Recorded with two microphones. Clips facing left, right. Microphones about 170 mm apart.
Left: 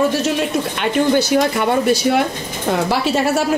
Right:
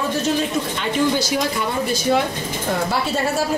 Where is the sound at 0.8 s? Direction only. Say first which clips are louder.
Left 5 dB; 60° left (ahead or behind).